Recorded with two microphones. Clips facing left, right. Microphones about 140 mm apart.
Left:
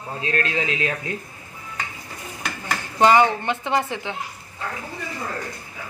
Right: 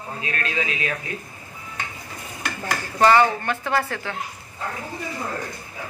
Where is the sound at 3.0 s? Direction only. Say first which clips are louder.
Left 1 dB; 15° left (ahead or behind).